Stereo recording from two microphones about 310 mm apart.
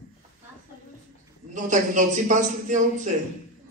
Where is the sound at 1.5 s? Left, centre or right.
Right.